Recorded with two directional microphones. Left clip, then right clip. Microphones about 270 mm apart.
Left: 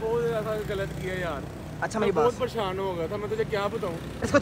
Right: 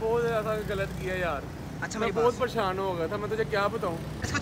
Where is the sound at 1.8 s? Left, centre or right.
Centre.